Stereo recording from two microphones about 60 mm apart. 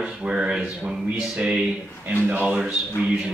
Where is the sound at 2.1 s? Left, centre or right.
Right.